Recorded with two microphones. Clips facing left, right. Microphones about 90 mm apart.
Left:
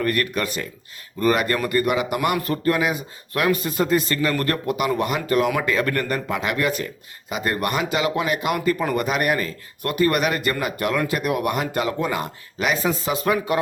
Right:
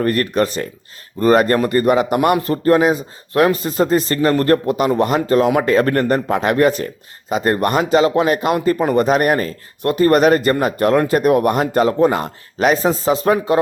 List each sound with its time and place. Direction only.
0.0 s a man's voice: 30° right (ahead or behind)